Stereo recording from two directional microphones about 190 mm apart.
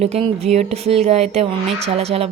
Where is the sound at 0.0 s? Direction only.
35° right (ahead or behind).